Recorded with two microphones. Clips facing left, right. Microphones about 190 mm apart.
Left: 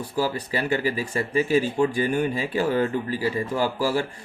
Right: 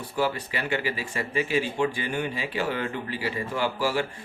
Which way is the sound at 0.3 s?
40° left (ahead or behind).